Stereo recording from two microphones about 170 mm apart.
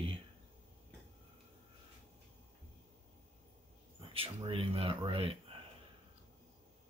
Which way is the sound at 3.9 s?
30° right (ahead or behind).